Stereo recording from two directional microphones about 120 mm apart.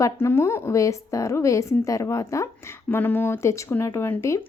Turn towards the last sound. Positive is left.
turn(degrees=20)  # may be behind; listen again after turning